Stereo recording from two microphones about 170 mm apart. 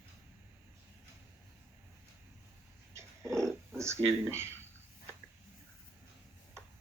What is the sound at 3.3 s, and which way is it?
Cat, 5° left (ahead or behind).